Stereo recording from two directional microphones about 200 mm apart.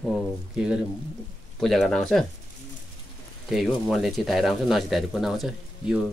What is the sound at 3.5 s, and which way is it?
Speech, centre (ahead or behind).